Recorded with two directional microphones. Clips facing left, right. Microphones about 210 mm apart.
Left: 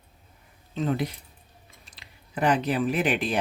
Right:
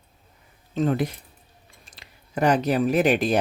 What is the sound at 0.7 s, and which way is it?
Speech, 50° right (ahead or behind).